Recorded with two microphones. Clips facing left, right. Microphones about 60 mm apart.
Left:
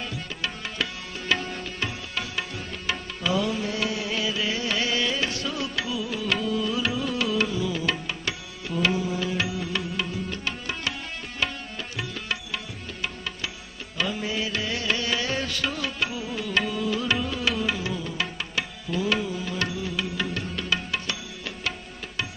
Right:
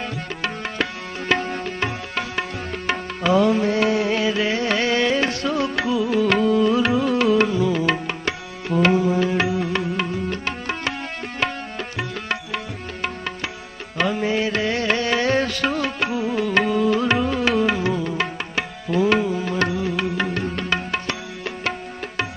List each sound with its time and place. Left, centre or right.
0.0 s music: right